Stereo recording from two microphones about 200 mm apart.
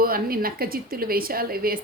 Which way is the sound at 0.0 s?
45° right (ahead or behind).